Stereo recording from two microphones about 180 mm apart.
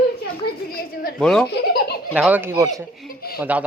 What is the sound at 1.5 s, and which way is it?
Baby laughter, 60° left (ahead or behind).